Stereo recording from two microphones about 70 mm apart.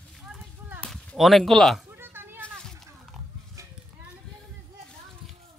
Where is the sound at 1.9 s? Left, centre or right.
Right.